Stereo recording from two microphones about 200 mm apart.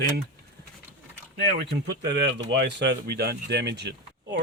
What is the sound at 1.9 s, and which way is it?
Speech, 60° right (ahead or behind).